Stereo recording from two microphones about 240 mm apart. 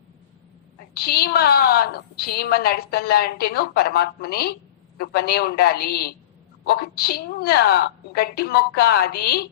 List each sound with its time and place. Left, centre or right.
0.9 s a woman's voice: left